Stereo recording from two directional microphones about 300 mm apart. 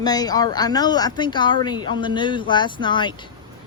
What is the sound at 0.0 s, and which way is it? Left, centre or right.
Speech, centre.